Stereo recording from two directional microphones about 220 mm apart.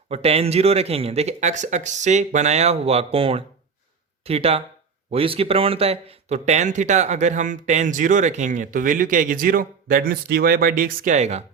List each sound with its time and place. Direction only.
0.1 s speech: 25° right (ahead or behind)